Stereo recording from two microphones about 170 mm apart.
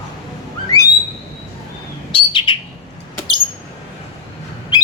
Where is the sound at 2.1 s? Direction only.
30° left (ahead or behind).